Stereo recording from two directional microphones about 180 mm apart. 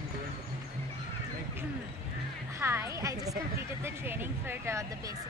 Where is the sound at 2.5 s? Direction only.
15° right (ahead or behind).